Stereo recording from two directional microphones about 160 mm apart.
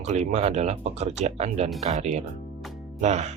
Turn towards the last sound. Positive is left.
turn(degrees=-45)  # may be behind; listen again after turning